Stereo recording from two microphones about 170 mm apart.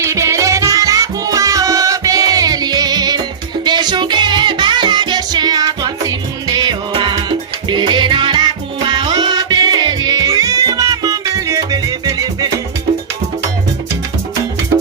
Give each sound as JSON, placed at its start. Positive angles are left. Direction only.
{"t": 0.0, "sound": "music", "side_deg": -15}